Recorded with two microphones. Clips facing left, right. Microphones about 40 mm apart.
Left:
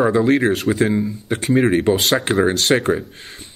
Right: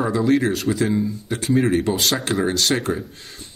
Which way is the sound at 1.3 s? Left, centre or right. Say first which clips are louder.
Left 3 dB; left.